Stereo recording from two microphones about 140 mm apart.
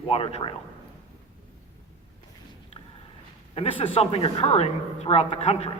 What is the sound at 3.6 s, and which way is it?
A man's voice, 40° left (ahead or behind).